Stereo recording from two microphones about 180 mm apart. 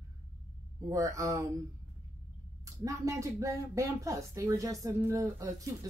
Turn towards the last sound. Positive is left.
turn(degrees=-25)  # may be behind; listen again after turning